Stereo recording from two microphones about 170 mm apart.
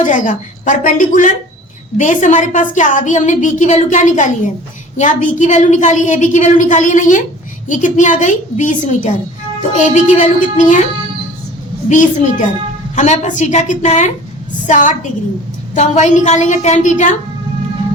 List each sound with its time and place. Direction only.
0.0 s a woman's voice: 50° left (ahead or behind)
11.9 s a woman's voice: 45° left (ahead or behind)